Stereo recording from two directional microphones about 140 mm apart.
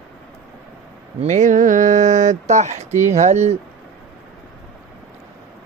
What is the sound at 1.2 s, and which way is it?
Speech, 60° right (ahead or behind).